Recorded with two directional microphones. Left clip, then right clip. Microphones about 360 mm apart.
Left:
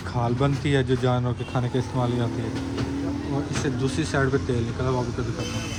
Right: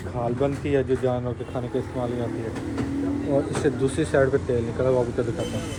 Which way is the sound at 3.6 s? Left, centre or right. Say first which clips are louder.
Right 4 dB; centre.